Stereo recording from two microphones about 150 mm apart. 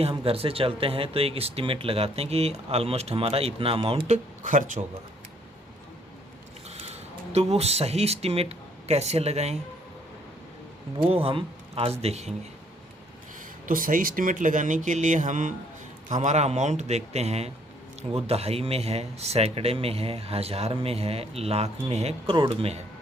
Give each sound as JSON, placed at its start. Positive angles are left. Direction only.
{"t": 0.0, "sound": "speech", "side_deg": -40}
{"t": 4.1, "sound": "speech", "side_deg": -55}
{"t": 6.7, "sound": "speech", "side_deg": -45}
{"t": 11.1, "sound": "speech", "side_deg": -40}
{"t": 13.7, "sound": "a man's voice", "side_deg": -65}